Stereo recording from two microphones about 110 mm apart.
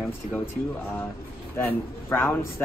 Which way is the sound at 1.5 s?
20° left (ahead or behind).